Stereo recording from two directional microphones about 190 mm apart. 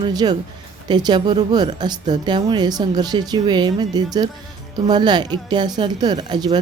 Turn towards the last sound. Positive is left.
turn(degrees=-20)  # may be behind; listen again after turning